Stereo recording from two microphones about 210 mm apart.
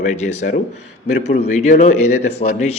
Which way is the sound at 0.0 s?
35° left (ahead or behind).